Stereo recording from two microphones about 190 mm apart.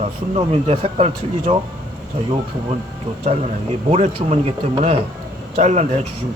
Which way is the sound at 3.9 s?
30° right (ahead or behind).